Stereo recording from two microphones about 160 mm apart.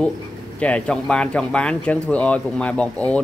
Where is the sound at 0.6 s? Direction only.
5° left (ahead or behind).